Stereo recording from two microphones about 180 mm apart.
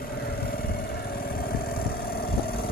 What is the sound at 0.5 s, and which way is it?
Vehicle, 55° left (ahead or behind).